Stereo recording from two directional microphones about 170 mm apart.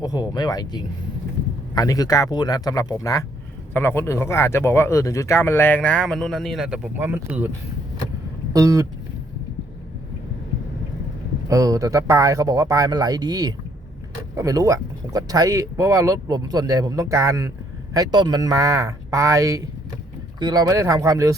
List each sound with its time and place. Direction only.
0.0 s speech: 25° left (ahead or behind); by 7.5 s 10° right (ahead or behind)
8.5 s speech: 20° right (ahead or behind)
11.4 s speech: 20° right (ahead or behind)